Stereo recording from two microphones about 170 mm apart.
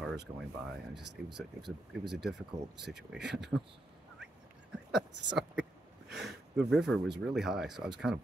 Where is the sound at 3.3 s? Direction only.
90° right.